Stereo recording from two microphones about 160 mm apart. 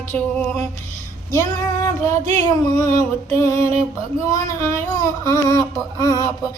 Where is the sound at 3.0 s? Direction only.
20° left (ahead or behind).